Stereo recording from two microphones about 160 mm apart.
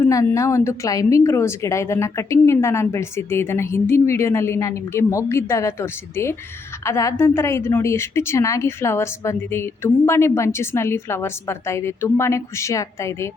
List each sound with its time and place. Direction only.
0.0 s a woman's voice: 20° left (ahead or behind)